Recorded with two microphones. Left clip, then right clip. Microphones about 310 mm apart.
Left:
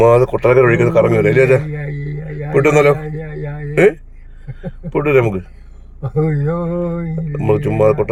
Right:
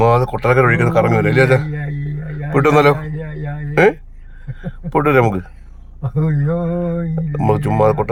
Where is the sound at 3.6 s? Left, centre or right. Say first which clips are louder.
Left 1 dB; centre.